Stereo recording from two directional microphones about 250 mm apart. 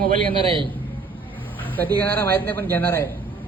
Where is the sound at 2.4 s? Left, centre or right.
Centre.